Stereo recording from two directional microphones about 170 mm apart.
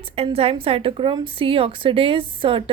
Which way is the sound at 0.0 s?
35° right (ahead or behind).